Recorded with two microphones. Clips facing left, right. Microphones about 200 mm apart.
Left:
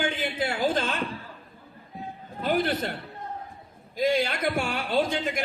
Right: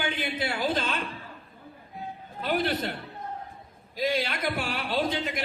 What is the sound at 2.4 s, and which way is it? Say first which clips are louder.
Speech: left 2 dB; 45° left (ahead or behind).